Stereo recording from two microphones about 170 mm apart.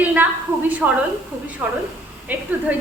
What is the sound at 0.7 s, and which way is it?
A woman's voice, 5° right (ahead or behind).